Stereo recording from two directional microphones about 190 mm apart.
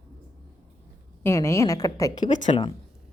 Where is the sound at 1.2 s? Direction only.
15° left (ahead or behind).